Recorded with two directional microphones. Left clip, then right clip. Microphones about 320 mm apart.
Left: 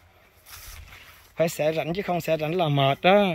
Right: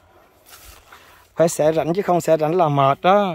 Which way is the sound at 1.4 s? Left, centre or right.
Right.